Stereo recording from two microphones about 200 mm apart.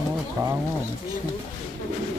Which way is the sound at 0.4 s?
15° right (ahead or behind).